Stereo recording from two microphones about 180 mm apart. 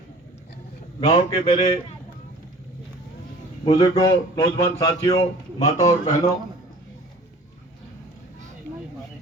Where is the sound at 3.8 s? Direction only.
20° left (ahead or behind).